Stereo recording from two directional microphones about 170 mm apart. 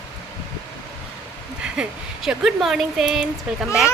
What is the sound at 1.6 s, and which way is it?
Speech, 5° right (ahead or behind).